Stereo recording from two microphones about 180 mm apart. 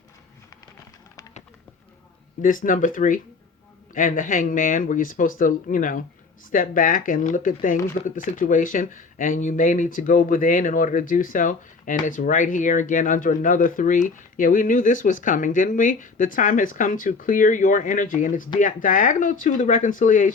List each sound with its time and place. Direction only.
2.4 s speech: 50° left (ahead or behind)